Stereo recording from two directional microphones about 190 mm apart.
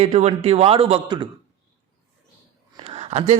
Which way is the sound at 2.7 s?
30° right (ahead or behind).